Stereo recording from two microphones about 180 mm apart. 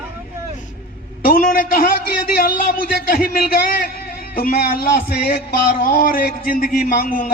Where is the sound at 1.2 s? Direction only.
50° left (ahead or behind).